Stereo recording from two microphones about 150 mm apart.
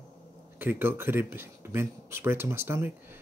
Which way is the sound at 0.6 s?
15° right (ahead or behind).